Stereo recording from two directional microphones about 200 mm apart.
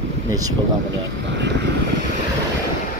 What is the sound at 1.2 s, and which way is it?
Vehicle, 60° right (ahead or behind).